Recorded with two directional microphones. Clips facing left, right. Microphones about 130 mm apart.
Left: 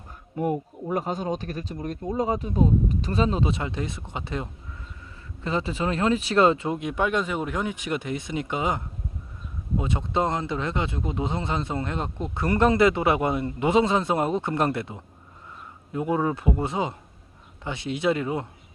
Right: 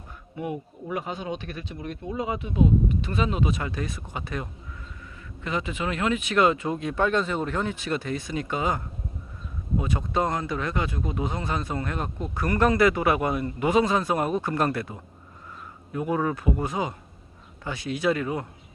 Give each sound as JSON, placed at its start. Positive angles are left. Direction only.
{"t": 0.3, "sound": "speech", "side_deg": 45}